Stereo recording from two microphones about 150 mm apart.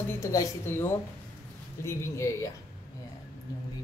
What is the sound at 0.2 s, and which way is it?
Speech, 20° left (ahead or behind).